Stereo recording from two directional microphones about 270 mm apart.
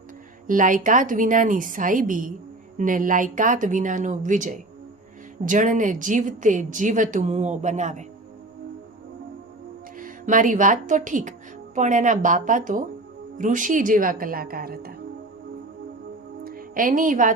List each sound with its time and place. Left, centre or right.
0.4 s speech: right
10.0 s a woman's voice: right
16.4 s music: right